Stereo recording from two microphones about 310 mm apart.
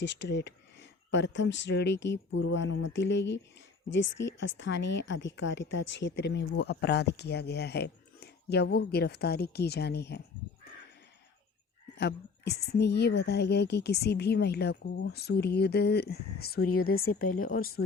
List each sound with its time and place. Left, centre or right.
0.0 s a woman's voice: left
11.9 s a woman's voice: left